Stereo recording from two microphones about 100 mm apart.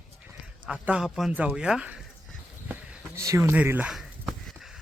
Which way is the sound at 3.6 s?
15° right (ahead or behind).